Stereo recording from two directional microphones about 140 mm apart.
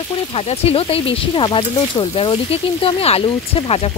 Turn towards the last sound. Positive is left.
turn(degrees=40)  # may be behind; listen again after turning